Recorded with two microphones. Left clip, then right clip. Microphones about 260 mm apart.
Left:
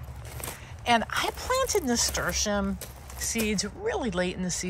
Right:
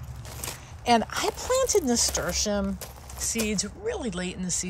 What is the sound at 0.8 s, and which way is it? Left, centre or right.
Speech, right.